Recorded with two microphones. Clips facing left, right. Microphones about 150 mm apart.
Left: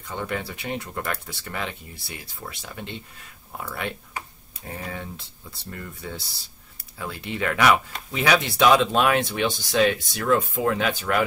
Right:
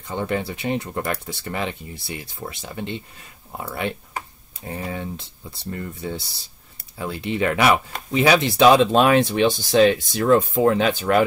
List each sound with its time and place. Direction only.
0.1 s speech: 25° right (ahead or behind)
5.8 s speech: 25° right (ahead or behind)